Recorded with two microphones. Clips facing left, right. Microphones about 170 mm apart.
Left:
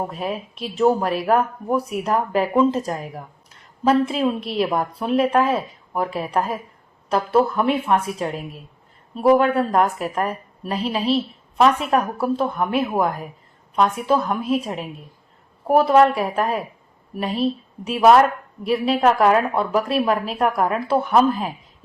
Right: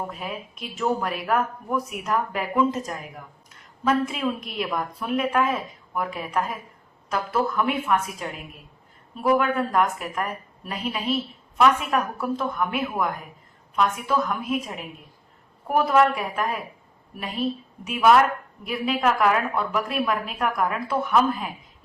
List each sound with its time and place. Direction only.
0.0 s a woman's voice: 30° left (ahead or behind)